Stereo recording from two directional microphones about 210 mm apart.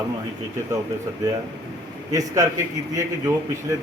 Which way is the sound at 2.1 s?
15° right (ahead or behind).